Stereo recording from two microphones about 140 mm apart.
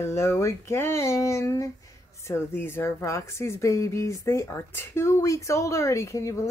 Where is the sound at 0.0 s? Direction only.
20° left (ahead or behind).